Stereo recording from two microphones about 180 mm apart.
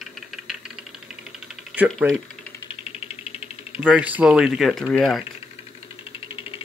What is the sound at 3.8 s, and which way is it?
Speech, 5° right (ahead or behind).